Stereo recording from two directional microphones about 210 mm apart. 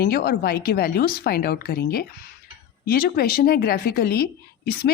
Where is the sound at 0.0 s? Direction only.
45° left (ahead or behind).